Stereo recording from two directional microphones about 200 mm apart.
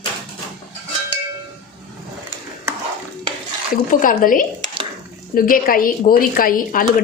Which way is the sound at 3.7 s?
45° left (ahead or behind).